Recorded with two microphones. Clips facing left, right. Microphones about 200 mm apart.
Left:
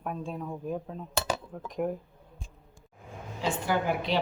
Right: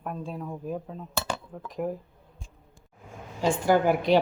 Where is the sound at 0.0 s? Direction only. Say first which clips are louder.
Even; centre (ahead or behind).